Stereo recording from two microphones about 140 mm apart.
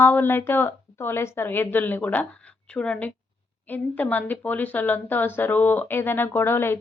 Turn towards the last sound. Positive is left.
turn(degrees=15)  # may be behind; listen again after turning